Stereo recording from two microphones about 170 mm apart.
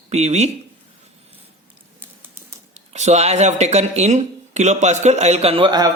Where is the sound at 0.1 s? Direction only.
40° right (ahead or behind).